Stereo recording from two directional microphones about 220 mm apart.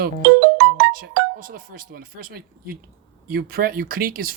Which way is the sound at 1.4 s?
40° right (ahead or behind).